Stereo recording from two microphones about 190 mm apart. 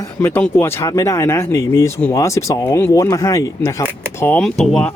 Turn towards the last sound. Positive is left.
turn(degrees=5)  # may be behind; listen again after turning